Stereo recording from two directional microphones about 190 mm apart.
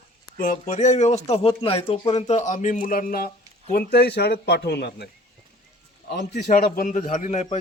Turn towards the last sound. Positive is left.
turn(degrees=40)  # may be behind; listen again after turning